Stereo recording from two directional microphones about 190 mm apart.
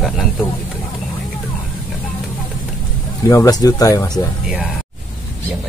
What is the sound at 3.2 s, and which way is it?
Speech, 15° left (ahead or behind).